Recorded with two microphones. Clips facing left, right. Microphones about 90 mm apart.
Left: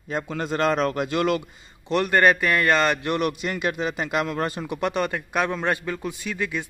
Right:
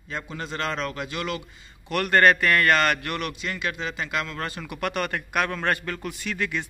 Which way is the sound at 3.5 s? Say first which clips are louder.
Left 4 dB; 35° left (ahead or behind).